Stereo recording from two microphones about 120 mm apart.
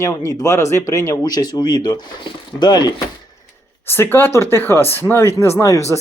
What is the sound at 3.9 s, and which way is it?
Speech, 20° left (ahead or behind).